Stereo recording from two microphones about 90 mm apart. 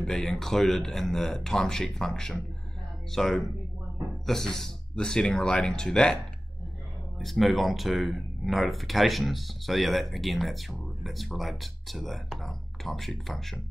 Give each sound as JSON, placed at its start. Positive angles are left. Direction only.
{"t": 0.0, "sound": "speech", "side_deg": 5}
{"t": 7.2, "sound": "speech", "side_deg": 0}